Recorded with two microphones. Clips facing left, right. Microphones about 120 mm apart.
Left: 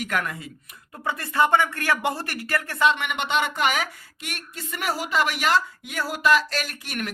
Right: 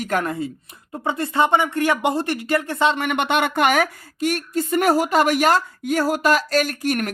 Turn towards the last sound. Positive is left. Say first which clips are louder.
# right 9 dB
turn(degrees=-45)  # may be behind; listen again after turning